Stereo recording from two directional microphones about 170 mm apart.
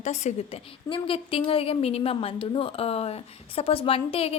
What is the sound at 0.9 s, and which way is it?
A woman's voice, 30° left (ahead or behind).